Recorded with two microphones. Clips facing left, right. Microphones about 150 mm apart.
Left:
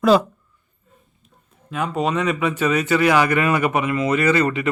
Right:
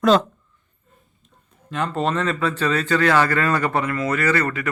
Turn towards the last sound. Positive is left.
turn(degrees=20)  # may be behind; listen again after turning